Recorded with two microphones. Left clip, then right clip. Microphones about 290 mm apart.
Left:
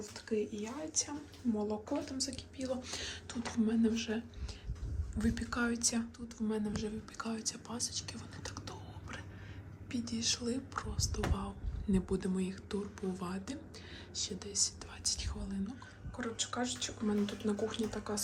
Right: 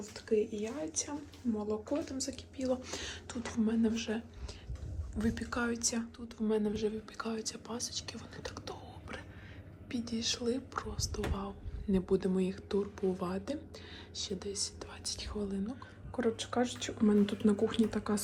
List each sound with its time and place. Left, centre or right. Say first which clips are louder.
0.0 s speech: right 5 dB; centre
16.1 s speech: right 6 dB; centre